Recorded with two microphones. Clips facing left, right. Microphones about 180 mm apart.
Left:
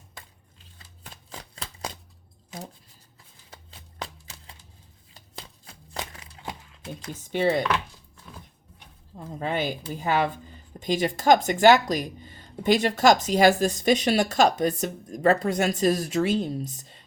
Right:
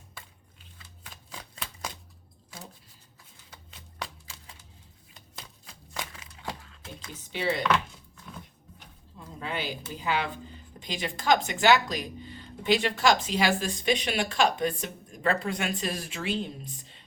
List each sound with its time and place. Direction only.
1.3 s a sound: 35° left (ahead or behind)
3.5 s shuffling cards: 30° left (ahead or behind)
7.1 s speech: 50° left (ahead or behind)
9.1 s speech: 50° left (ahead or behind)